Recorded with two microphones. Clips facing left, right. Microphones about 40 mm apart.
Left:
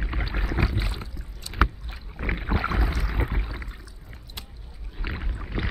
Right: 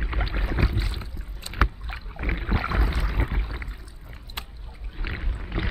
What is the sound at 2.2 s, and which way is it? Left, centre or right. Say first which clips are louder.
Rowboat: left 1 dB; centre.